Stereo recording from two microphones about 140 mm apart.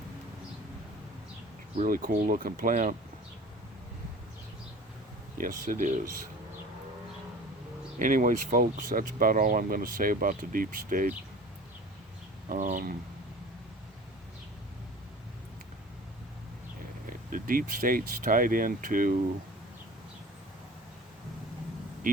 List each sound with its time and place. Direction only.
1.7 s speech: 75° right (ahead or behind)
5.4 s speech: 80° right
7.9 s speech: 70° right (ahead or behind)
12.5 s speech: 70° right (ahead or behind)
17.1 s speech: 85° right
22.0 s speech: 70° right (ahead or behind)